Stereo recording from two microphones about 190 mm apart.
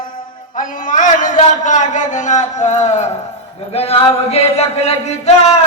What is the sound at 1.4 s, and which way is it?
Chant, 40° left (ahead or behind).